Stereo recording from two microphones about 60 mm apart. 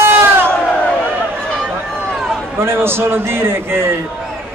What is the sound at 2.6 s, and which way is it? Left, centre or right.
A man's voice, right.